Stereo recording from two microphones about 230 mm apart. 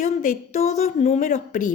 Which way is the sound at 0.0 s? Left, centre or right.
Left.